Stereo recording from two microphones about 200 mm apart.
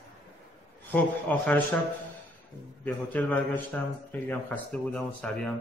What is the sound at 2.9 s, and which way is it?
A man's voice, 10° left (ahead or behind).